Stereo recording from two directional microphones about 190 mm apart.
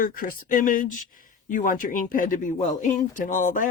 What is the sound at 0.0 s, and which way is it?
Speech, 50° left (ahead or behind).